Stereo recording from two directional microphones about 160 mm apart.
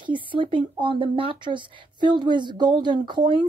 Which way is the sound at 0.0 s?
30° right (ahead or behind).